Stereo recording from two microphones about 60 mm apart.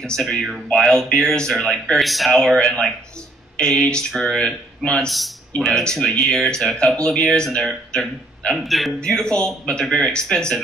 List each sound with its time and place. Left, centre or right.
0.0 s speech: centre
2.0 s speech: centre
7.2 s speech: centre
9.0 s speech: centre